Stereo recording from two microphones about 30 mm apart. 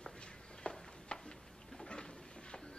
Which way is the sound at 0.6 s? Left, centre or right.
Left.